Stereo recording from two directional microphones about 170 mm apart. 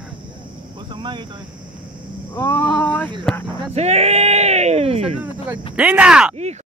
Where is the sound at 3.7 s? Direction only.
40° right (ahead or behind).